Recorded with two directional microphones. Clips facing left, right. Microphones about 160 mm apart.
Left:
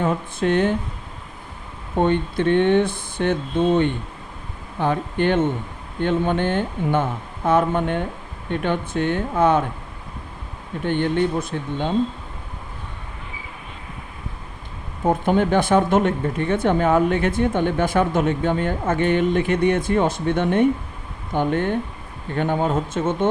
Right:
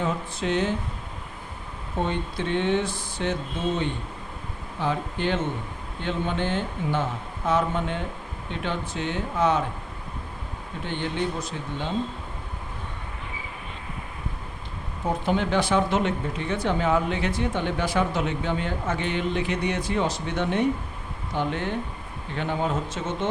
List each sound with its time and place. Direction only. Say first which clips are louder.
0.0 s speech: left 6 dB; 55° left (ahead or behind)
2.0 s speech: left 8 dB; 60° left (ahead or behind)
4.8 s speech: left 6 dB; 55° left (ahead or behind)
10.8 s speech: left 8 dB; 55° left (ahead or behind)
15.2 s speech: left 4 dB; 50° left (ahead or behind)